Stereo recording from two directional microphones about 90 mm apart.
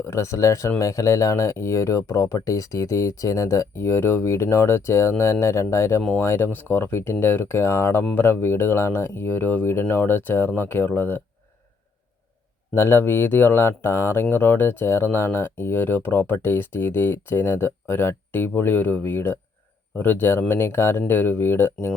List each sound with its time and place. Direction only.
0.1 s speech: 30° left (ahead or behind)
12.7 s speech: 25° left (ahead or behind)